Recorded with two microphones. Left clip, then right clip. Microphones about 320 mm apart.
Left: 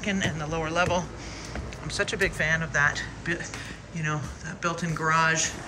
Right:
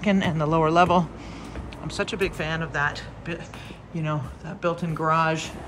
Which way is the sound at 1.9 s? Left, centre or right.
Centre.